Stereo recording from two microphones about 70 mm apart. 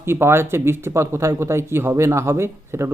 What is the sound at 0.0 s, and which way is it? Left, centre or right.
Speech, right.